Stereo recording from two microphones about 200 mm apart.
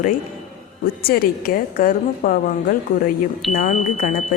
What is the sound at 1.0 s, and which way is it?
A woman's voice, 50° left (ahead or behind).